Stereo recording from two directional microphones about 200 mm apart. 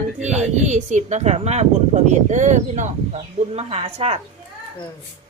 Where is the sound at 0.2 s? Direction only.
35° right (ahead or behind).